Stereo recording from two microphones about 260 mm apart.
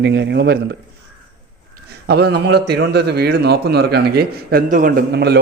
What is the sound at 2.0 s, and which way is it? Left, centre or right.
A man's voice, right.